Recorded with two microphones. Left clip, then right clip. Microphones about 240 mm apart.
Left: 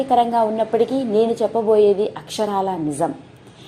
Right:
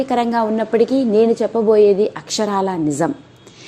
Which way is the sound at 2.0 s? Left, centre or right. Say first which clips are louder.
Right 3 dB; right.